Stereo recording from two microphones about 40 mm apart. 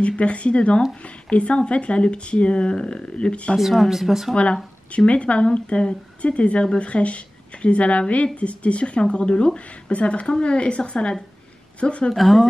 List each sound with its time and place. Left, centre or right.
0.0 s speech: left
1.0 s a sound: left
1.7 s speech: left
3.5 s speech: centre
4.9 s a woman's voice: left
12.1 s speech: centre